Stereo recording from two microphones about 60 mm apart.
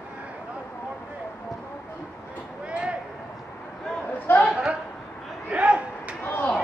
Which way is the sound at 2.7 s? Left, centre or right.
Centre.